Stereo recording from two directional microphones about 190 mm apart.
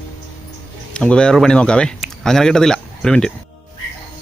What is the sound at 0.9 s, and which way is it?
Speech, 5° left (ahead or behind).